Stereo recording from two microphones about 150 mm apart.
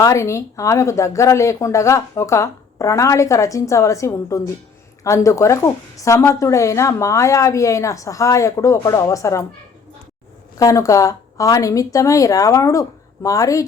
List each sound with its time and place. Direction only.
0.0 s speech: 20° left (ahead or behind)
10.6 s speech: 20° left (ahead or behind)